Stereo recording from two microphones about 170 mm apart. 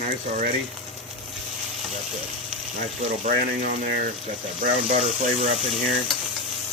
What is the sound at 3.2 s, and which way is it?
Speech, 55° right (ahead or behind).